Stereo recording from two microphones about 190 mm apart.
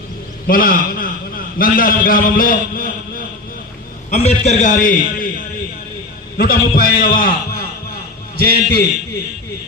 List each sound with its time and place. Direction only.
0.4 s a man's voice: 50° left (ahead or behind)
4.1 s a man's voice: 35° left (ahead or behind)
6.3 s a man's voice: 50° left (ahead or behind)